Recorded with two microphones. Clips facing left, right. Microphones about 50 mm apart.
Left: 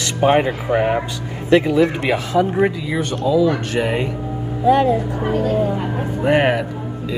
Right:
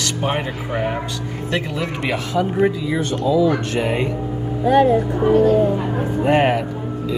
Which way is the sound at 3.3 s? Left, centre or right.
Centre.